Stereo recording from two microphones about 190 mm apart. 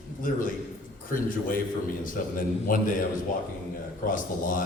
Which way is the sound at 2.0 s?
45° left (ahead or behind).